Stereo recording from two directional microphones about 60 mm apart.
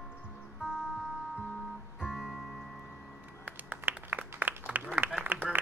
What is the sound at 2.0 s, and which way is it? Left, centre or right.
Music, centre.